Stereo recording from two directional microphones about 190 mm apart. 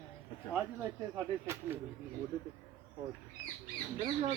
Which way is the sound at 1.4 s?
10° right (ahead or behind).